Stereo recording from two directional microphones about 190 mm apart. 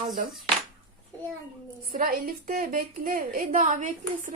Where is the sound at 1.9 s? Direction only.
45° right (ahead or behind).